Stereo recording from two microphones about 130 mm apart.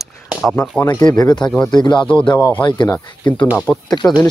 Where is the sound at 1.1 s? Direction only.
35° left (ahead or behind).